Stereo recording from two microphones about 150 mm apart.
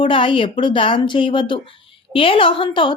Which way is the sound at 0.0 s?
35° left (ahead or behind).